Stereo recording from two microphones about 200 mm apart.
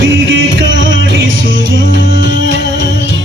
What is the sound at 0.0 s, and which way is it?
Music, 70° right (ahead or behind).